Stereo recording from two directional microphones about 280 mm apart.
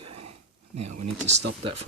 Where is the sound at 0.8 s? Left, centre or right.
Right.